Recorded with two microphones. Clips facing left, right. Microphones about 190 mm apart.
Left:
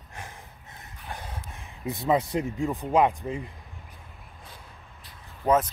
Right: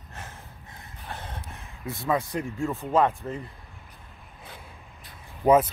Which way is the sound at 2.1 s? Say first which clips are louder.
Left 2 dB; 20° left (ahead or behind).